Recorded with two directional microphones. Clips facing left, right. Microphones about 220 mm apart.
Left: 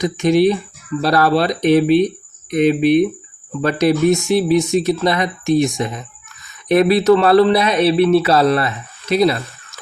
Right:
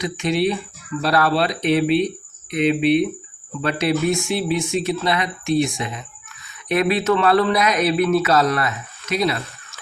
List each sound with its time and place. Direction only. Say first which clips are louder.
0.0 s speech: left 7 dB; 40° left (ahead or behind)